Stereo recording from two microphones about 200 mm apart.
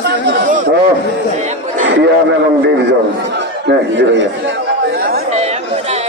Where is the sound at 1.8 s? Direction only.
65° right (ahead or behind).